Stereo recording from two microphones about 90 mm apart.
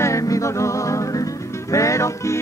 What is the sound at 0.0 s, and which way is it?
Music, 35° left (ahead or behind).